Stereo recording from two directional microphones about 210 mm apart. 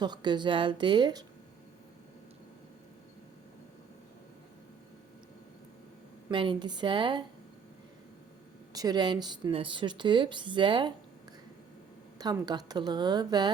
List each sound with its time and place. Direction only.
0.0 s speech: 20° right (ahead or behind)
6.3 s speech: 25° right (ahead or behind)
8.7 s speech: 20° right (ahead or behind)
12.2 s speech: 20° right (ahead or behind)